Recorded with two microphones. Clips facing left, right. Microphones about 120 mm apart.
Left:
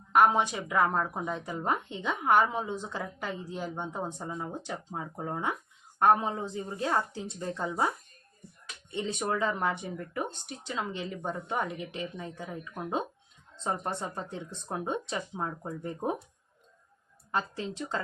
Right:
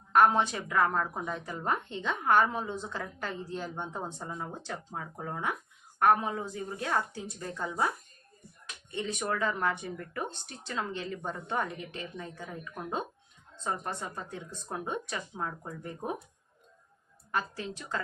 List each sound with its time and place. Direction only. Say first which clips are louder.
0.1 s speech: even; 10° left (ahead or behind)
13.7 s speech: left 2 dB; 25° left (ahead or behind)
17.3 s speech: left 2 dB; 25° left (ahead or behind)